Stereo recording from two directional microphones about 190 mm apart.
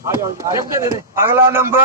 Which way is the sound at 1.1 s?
15° right (ahead or behind).